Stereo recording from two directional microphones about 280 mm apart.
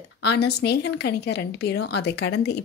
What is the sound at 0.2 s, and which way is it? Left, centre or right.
A woman's voice, left.